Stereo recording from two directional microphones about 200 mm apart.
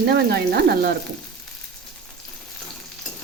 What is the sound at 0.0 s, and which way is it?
Speech, 55° right (ahead or behind).